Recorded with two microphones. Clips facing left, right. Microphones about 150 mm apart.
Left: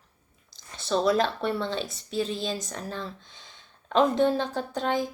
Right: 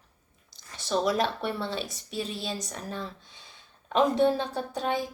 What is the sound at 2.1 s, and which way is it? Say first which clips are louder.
Speech: left 6 dB; 90° left.